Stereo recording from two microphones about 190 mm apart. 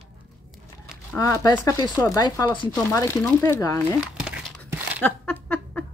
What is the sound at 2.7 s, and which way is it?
Speech, 15° left (ahead or behind).